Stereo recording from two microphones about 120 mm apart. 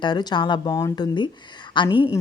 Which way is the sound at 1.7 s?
40° left (ahead or behind).